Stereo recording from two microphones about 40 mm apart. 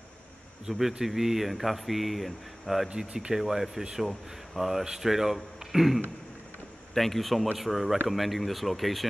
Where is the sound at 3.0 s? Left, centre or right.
Right.